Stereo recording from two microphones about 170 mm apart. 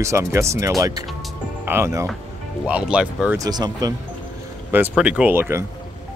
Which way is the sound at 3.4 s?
25° right (ahead or behind).